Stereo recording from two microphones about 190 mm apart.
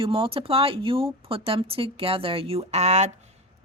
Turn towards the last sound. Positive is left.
turn(degrees=-35)  # may be behind; listen again after turning